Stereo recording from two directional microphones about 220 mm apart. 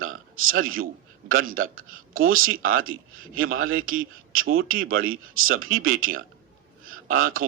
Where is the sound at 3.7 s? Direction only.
40° right (ahead or behind).